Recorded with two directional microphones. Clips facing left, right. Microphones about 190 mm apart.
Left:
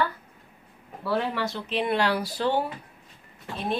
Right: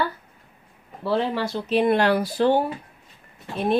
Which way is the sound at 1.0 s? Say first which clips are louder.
Right 4 dB; 30° right (ahead or behind).